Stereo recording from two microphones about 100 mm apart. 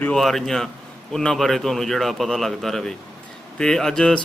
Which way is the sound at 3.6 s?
5° left (ahead or behind).